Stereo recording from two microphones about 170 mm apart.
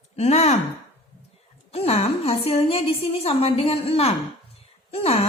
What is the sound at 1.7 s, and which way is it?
A woman's voice, 35° left (ahead or behind).